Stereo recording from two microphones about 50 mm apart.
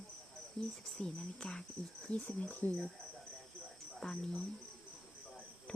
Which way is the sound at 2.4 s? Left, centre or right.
Left.